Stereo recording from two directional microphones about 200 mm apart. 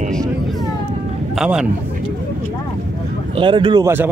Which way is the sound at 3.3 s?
25° right (ahead or behind).